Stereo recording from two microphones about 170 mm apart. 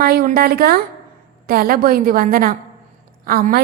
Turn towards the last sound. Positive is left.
turn(degrees=-60)  # may be behind; listen again after turning